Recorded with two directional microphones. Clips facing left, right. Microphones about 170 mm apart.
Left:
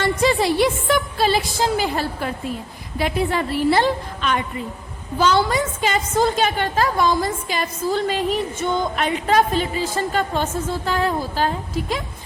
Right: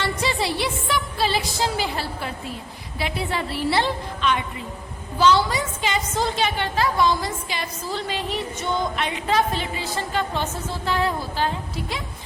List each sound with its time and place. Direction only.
0.0 s a woman's voice: 45° left (ahead or behind)